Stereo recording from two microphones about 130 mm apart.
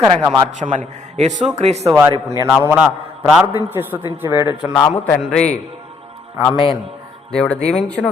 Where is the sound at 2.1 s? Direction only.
25° right (ahead or behind).